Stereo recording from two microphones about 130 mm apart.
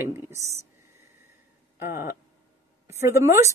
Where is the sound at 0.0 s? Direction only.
20° right (ahead or behind).